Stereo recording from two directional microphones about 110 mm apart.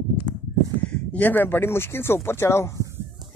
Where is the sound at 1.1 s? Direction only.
15° left (ahead or behind).